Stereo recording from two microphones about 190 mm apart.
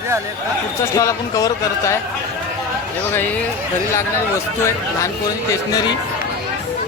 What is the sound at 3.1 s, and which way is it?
Speech, 10° left (ahead or behind).